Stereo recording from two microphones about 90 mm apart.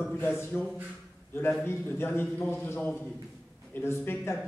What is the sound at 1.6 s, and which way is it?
A man's voice, 25° left (ahead or behind).